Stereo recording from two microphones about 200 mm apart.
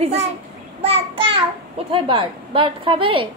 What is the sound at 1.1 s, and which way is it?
Child singing, 25° right (ahead or behind).